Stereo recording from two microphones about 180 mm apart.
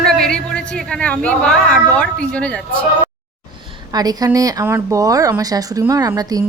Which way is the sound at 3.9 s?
20° right (ahead or behind).